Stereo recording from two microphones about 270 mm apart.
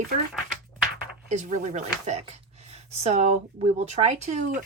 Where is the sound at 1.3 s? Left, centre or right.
Right.